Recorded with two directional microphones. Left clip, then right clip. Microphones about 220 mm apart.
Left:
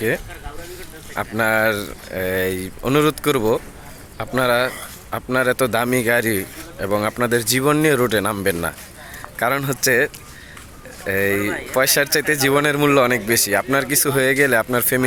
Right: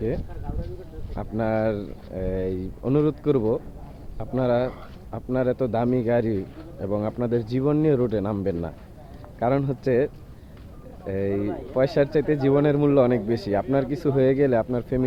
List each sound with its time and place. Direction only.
1.1 s speech: 5° left (ahead or behind)
4.4 s speech: 5° left (ahead or behind)
11.3 s speech: 55° left (ahead or behind)
11.8 s speech: 5° left (ahead or behind)